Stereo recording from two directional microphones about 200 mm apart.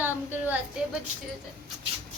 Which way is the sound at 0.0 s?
10° right (ahead or behind).